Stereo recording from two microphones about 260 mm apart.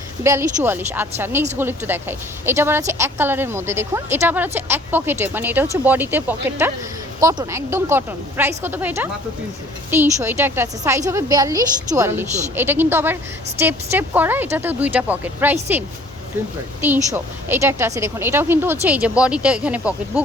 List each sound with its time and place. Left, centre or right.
0.2 s a woman's voice: centre
16.8 s a woman's voice: centre